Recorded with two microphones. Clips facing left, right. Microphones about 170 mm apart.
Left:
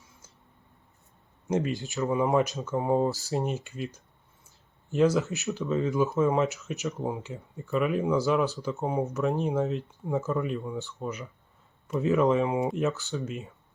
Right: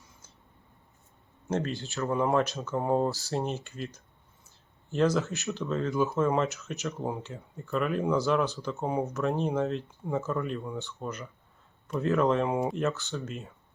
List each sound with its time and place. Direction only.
1.5 s speech: 15° left (ahead or behind)
2.0 s speech: centre (ahead or behind)